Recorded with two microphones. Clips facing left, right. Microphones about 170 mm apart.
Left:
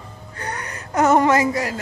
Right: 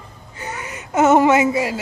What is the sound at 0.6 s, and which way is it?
Gasp, 20° right (ahead or behind).